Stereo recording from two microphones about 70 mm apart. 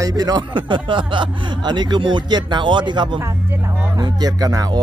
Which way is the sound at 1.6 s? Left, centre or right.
Right.